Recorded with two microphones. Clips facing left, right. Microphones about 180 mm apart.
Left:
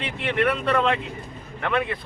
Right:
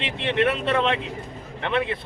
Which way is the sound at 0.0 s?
25° right (ahead or behind).